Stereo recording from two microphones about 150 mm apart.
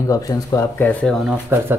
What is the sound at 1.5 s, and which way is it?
Speech, 15° right (ahead or behind).